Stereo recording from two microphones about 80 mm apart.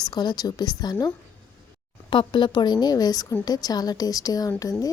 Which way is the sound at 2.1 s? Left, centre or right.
Left.